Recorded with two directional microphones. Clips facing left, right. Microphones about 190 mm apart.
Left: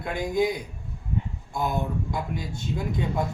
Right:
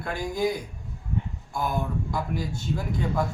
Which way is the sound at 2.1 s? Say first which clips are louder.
Right 1 dB; 20° left (ahead or behind).